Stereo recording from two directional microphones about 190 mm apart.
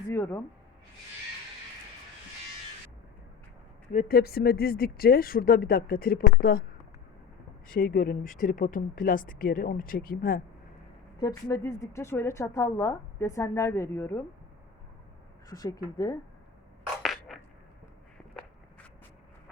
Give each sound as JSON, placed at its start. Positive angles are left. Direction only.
{"t": 0.1, "sound": "a sound", "side_deg": 10}
{"t": 3.9, "sound": "speech", "side_deg": 55}
{"t": 7.7, "sound": "speech", "side_deg": 50}
{"t": 11.2, "sound": "a woman's voice", "side_deg": 20}
{"t": 15.4, "sound": "speech", "side_deg": 20}
{"t": 17.0, "sound": "a sound", "side_deg": 0}